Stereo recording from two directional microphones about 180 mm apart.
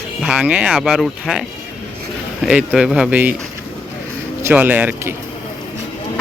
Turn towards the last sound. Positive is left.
turn(degrees=-10)  # may be behind; listen again after turning